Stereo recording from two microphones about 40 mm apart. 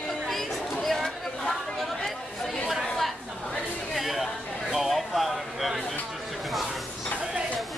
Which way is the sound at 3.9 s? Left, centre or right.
Centre.